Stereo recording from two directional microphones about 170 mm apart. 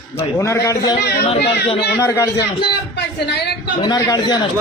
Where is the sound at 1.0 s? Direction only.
70° left (ahead or behind).